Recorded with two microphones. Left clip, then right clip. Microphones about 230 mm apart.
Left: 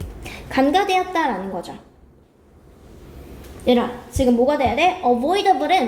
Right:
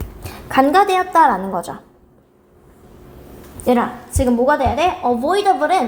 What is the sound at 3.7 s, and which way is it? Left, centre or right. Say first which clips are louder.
Speech: right 2 dB; right.